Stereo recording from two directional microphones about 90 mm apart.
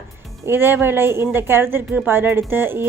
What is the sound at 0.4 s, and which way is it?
A woman's voice, 25° right (ahead or behind).